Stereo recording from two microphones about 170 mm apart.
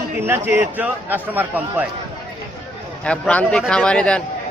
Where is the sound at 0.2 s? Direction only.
15° right (ahead or behind).